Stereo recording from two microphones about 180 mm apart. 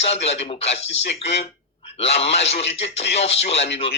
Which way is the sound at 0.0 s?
35° left (ahead or behind).